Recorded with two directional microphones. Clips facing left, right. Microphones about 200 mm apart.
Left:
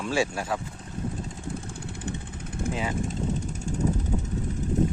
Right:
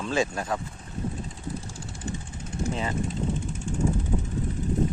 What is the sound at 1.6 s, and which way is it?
Vehicle, 60° left (ahead or behind).